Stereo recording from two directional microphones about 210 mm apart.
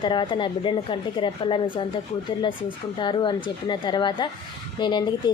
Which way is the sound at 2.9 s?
20° left (ahead or behind).